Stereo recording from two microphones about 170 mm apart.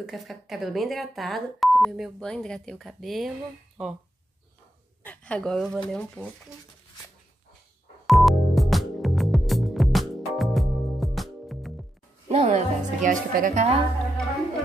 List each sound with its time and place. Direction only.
0.0 s speech: centre (ahead or behind)
5.0 s speech: 10° left (ahead or behind)
8.1 s music: centre (ahead or behind)
12.3 s a woman's voice: 40° right (ahead or behind)